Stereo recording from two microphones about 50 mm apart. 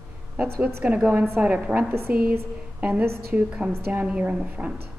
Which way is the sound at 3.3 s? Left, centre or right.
Right.